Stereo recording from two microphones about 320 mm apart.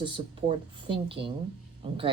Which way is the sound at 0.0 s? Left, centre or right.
Centre.